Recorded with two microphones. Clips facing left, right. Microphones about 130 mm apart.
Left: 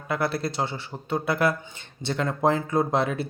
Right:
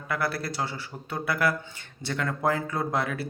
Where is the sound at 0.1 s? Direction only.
25° left (ahead or behind).